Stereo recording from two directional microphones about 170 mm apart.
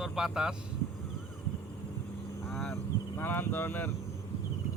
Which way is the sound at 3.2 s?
10° left (ahead or behind).